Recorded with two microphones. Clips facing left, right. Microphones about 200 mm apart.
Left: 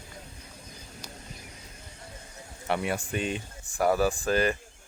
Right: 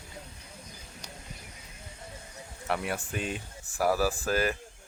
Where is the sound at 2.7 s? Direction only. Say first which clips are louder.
Left 3 dB; centre (ahead or behind).